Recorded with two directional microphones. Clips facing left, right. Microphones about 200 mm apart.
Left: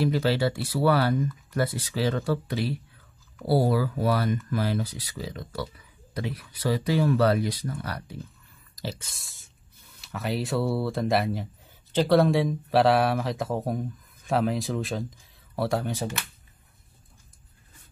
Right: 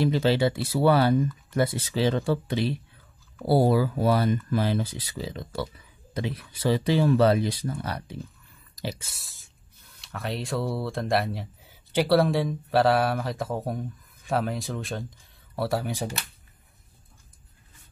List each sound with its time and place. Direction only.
0.0 s speech: 20° right (ahead or behind)
8.8 s speech: 10° right (ahead or behind)
11.9 s speech: 10° right (ahead or behind)
12.2 s speech: centre (ahead or behind)